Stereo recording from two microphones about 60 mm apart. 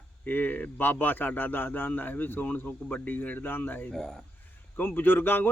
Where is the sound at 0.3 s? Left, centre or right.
Left.